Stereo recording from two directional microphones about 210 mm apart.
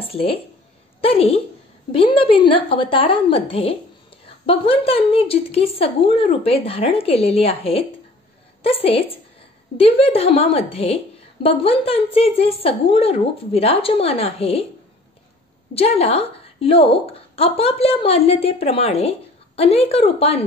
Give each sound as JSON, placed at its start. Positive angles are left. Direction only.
{"t": 0.0, "sound": "a woman's voice", "side_deg": 25}
{"t": 15.7, "sound": "a woman's voice", "side_deg": 30}